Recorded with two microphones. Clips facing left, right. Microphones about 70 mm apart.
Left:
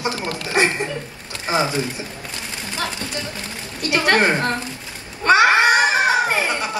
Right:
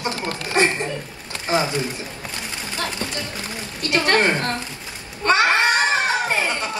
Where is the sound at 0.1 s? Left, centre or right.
Right.